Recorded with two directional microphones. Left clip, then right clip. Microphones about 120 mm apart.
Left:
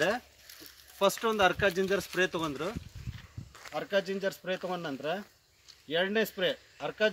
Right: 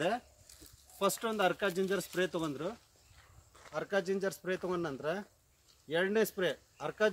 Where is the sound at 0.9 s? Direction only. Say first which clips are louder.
Left 6 dB; 10° left (ahead or behind); by 2.7 s 25° left (ahead or behind).